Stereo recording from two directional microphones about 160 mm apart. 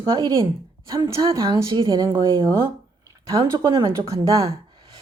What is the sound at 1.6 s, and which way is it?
Speech, 30° right (ahead or behind).